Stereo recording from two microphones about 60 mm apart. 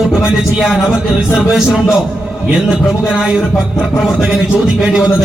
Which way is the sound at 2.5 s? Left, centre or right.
Centre.